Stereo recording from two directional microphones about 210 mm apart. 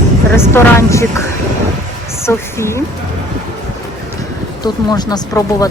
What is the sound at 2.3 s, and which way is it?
Speech, 10° left (ahead or behind).